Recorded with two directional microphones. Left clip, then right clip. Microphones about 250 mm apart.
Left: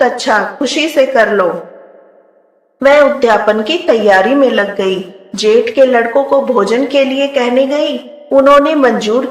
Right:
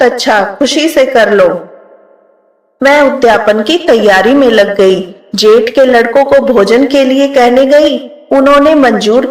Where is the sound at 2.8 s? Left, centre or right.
Centre.